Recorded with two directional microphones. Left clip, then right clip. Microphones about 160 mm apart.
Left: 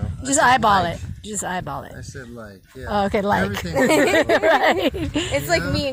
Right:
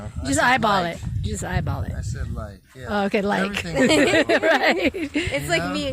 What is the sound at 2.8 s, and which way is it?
Speech, 20° right (ahead or behind).